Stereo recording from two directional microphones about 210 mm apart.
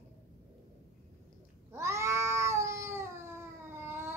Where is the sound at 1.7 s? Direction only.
15° right (ahead or behind).